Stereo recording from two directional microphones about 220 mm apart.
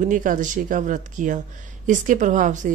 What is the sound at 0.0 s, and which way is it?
A woman's voice, 35° right (ahead or behind).